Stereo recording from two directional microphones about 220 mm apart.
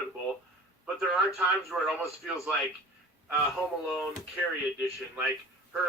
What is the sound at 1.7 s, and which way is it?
Speech, centre (ahead or behind).